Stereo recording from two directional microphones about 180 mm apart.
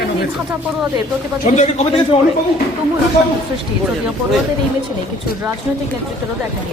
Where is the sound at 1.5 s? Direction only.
40° left (ahead or behind).